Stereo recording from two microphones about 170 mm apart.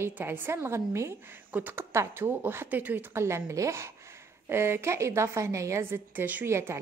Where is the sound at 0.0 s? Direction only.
10° right (ahead or behind).